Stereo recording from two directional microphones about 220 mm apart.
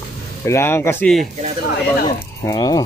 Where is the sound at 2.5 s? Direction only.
15° left (ahead or behind).